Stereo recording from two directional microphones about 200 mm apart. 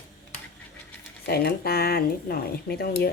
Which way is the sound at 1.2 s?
50° left (ahead or behind).